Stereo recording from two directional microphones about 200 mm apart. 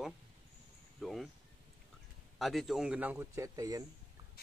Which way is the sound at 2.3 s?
Centre (ahead or behind).